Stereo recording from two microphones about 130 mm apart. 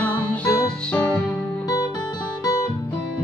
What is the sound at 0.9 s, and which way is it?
Music, 15° left (ahead or behind).